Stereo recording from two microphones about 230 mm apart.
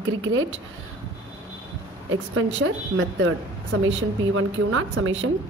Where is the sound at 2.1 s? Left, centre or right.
Right.